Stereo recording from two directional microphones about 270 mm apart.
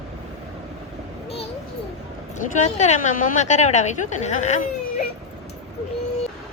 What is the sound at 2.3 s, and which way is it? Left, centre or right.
A woman's voice, left.